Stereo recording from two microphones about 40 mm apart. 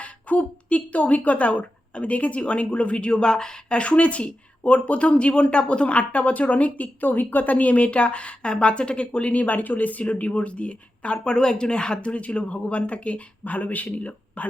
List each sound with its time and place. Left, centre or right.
0.0 s speech: left
11.2 s speech: centre; by 14.4 s left